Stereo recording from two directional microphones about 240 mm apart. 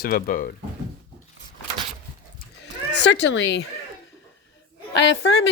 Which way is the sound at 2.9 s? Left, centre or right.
Left.